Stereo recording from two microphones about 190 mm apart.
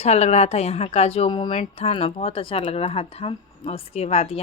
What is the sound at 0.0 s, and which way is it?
Speech, 35° left (ahead or behind).